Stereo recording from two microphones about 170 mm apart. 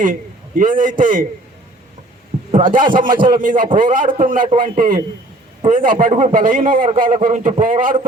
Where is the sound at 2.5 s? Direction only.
55° right (ahead or behind).